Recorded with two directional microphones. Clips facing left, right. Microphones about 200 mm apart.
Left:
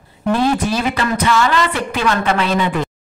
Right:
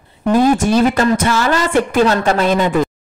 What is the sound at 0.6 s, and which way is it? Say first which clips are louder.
Speech: right 6 dB; 45° right (ahead or behind).